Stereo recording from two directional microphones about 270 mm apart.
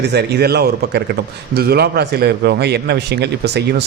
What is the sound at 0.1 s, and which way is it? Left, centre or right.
A man's voice, right.